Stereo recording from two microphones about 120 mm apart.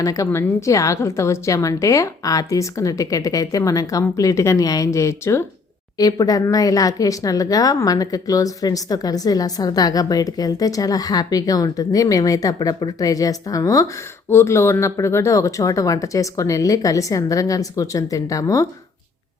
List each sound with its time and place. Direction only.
0.0 s speech: 30° left (ahead or behind)